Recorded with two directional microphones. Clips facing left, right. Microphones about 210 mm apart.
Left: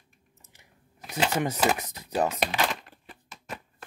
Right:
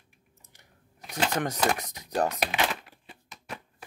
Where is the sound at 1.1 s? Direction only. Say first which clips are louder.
Left 2 dB; 5° left (ahead or behind).